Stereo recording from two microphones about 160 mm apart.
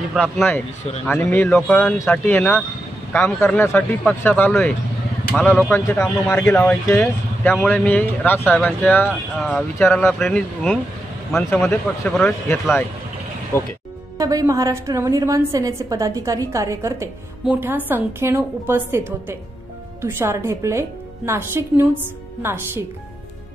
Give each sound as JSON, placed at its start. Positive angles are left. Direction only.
{"t": 0.1, "sound": "speech", "side_deg": 0}
{"t": 1.0, "sound": "speech", "side_deg": 10}
{"t": 9.8, "sound": "speech", "side_deg": 15}
{"t": 10.1, "sound": "speech", "side_deg": 5}
{"t": 14.1, "sound": "a woman's voice", "side_deg": -20}